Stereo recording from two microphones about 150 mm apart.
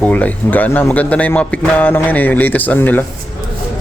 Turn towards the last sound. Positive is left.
turn(degrees=10)  # may be behind; listen again after turning